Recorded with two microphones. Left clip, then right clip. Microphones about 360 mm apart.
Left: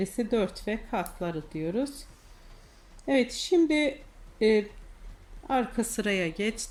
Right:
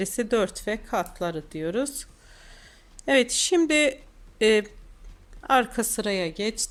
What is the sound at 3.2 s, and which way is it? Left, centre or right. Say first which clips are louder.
Speech: right 2 dB; right.